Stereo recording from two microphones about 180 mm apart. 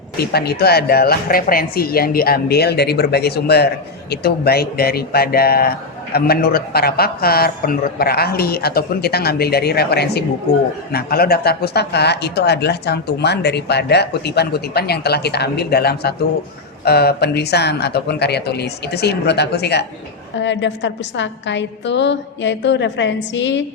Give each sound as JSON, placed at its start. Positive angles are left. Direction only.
{"t": 0.2, "sound": "speech", "side_deg": 60}
{"t": 20.4, "sound": "a woman's voice", "side_deg": 85}